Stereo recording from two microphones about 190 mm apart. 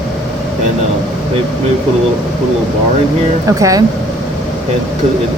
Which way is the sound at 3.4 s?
15° right (ahead or behind).